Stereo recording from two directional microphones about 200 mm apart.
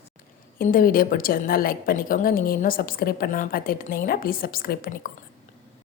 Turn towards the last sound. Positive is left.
turn(degrees=45)  # may be behind; listen again after turning